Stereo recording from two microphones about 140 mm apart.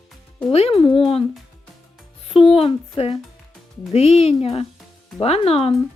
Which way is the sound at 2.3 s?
40° left (ahead or behind).